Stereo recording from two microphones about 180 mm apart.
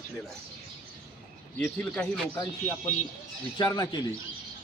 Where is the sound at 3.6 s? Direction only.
20° left (ahead or behind).